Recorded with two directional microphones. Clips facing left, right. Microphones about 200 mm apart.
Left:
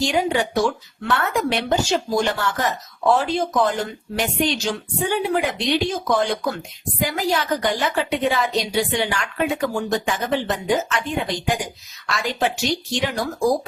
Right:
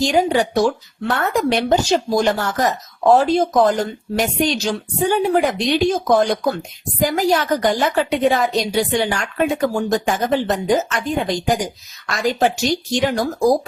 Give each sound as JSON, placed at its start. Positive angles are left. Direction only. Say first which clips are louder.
{"t": 0.0, "sound": "a woman's voice", "louder": "right 4 dB", "side_deg": -35}